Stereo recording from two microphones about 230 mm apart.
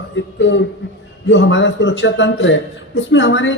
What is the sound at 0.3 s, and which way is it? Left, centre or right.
A man's voice, left.